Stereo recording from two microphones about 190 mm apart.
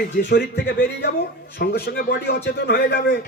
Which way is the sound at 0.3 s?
55° left (ahead or behind).